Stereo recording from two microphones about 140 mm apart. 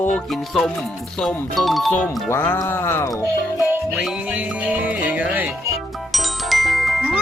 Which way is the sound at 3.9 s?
5° right (ahead or behind).